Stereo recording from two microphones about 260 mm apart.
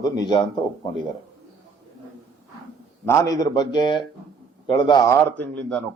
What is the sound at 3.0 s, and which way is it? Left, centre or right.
A man's voice, centre.